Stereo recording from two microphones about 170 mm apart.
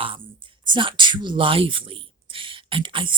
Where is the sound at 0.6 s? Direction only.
30° right (ahead or behind).